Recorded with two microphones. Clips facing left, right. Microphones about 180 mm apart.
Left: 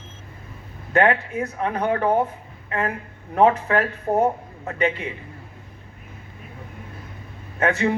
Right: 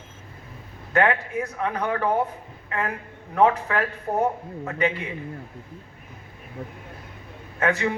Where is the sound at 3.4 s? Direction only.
25° left (ahead or behind).